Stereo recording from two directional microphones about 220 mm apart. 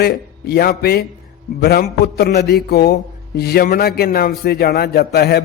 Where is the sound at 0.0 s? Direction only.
45° left (ahead or behind).